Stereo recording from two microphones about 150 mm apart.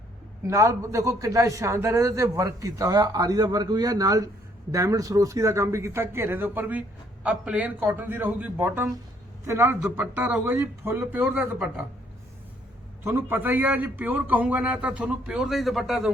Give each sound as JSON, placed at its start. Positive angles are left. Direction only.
{"t": 0.4, "sound": "a man's voice", "side_deg": -20}
{"t": 13.1, "sound": "a man's voice", "side_deg": -15}